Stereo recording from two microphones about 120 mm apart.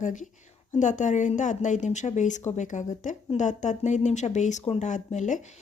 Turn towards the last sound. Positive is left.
turn(degrees=90)